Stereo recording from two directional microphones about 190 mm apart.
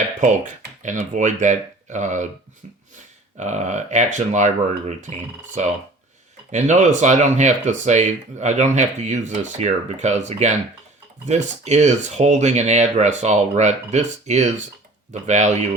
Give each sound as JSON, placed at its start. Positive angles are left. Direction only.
{"t": 0.8, "sound": "speech", "side_deg": -40}
{"t": 3.3, "sound": "speech", "side_deg": -35}